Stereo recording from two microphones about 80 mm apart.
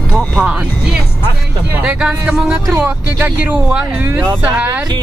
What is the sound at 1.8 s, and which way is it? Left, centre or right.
Speech, centre.